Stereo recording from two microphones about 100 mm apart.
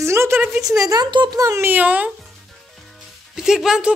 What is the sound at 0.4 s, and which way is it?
Speech, 5° right (ahead or behind).